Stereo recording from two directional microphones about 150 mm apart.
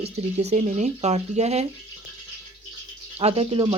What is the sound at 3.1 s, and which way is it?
Speech, 40° right (ahead or behind).